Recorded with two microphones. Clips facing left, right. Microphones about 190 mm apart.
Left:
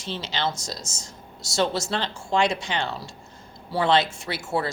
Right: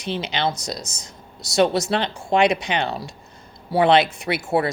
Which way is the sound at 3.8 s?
65° right (ahead or behind).